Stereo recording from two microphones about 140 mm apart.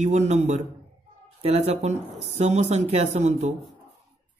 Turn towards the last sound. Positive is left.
turn(degrees=-55)  # may be behind; listen again after turning